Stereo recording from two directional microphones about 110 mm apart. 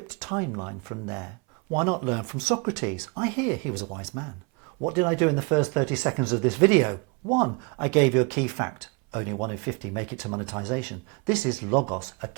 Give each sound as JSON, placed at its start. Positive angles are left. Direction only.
{"t": 0.2, "sound": "speech", "side_deg": -20}